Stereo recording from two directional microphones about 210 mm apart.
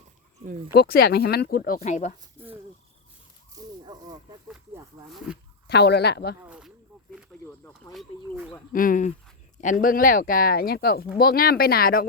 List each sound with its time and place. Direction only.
0.7 s speech: 45° left (ahead or behind)
3.5 s snake: 20° right (ahead or behind)
4.4 s speech: 5° right (ahead or behind)
5.6 s speech: 50° left (ahead or behind)
6.4 s speech: 5° right (ahead or behind)
7.9 s speech: 5° right (ahead or behind)
8.7 s speech: 40° left (ahead or behind)